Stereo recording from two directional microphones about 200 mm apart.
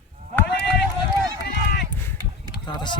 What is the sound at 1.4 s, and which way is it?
Run, 55° left (ahead or behind).